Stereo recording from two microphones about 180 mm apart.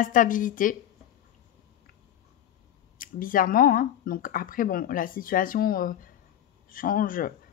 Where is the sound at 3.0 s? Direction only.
50° left (ahead or behind).